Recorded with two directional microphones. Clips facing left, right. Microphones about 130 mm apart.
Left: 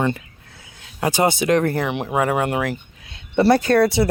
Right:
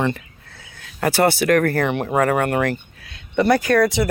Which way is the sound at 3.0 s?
25° left (ahead or behind).